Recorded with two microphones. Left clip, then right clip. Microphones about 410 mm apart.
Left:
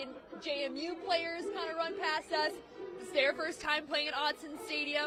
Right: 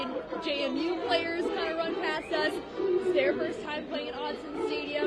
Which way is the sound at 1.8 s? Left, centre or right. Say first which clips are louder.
Right 4 dB; left.